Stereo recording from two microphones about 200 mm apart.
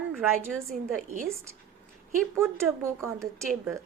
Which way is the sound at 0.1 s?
5° right (ahead or behind).